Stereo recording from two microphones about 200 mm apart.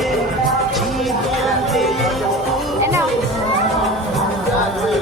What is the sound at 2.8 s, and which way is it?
Music, 15° right (ahead or behind).